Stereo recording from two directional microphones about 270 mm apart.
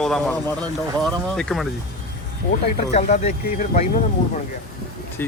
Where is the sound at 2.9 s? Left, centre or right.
Left.